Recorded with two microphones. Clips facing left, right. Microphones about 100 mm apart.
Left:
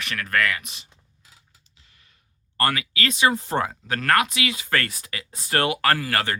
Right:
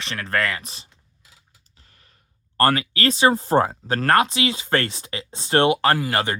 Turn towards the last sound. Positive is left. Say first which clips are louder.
# right 2 dB
turn(degrees=-20)  # may be behind; listen again after turning